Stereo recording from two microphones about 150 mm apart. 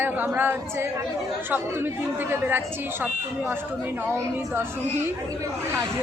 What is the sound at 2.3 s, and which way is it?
Speech, 15° right (ahead or behind).